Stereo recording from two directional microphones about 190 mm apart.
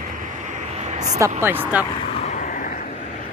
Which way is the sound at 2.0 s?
30° left (ahead or behind).